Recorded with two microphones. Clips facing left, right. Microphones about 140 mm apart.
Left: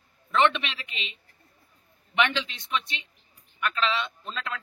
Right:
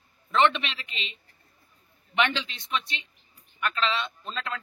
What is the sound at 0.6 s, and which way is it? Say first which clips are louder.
Speech: even; 15° left (ahead or behind).